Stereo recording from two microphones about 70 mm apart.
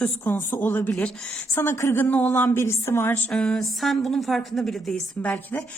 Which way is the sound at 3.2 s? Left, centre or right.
Centre.